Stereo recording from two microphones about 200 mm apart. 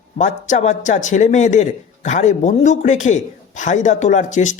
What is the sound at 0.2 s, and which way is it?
A man's voice, 35° left (ahead or behind).